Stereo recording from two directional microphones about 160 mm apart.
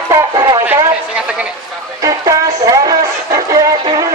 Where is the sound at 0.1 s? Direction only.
20° right (ahead or behind).